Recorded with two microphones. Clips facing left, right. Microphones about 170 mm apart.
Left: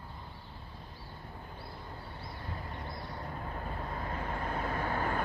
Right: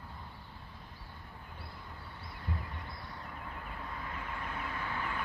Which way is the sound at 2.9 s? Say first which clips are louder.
Left 5 dB; 35° left (ahead or behind).